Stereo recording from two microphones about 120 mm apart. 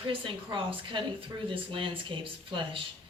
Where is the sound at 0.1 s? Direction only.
45° right (ahead or behind).